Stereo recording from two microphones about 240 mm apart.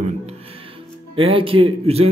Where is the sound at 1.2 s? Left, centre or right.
Right.